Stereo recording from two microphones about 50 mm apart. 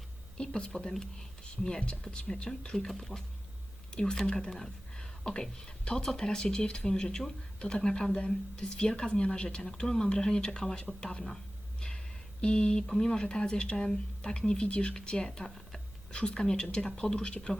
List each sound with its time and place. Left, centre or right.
0.3 s speech: centre
15.4 s a sound: centre
16.1 s speech: centre